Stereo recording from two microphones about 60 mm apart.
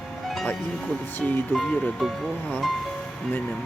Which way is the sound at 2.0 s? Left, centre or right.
Centre.